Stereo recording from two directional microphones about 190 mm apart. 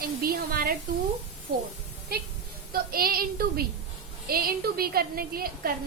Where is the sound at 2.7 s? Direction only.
50° right (ahead or behind).